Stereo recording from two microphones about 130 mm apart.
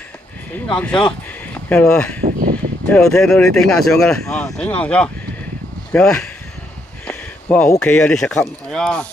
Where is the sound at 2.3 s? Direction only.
90° right.